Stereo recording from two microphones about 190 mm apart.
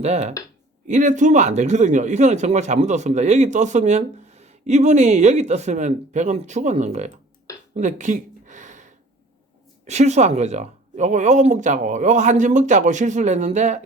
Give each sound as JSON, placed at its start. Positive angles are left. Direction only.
{"t": 0.0, "sound": "speech", "side_deg": -35}
{"t": 7.8, "sound": "a sound", "side_deg": -40}
{"t": 9.8, "sound": "speech", "side_deg": -35}